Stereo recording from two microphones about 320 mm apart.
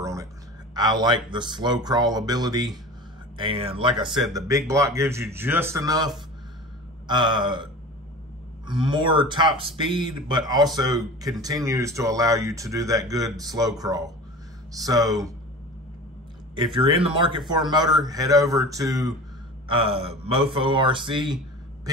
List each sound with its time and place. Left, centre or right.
0.0 s a sound: centre
0.7 s speech: centre
8.6 s speech: centre
16.7 s speech: centre